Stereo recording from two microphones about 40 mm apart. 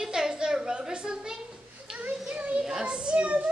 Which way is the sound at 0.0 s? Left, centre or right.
Centre.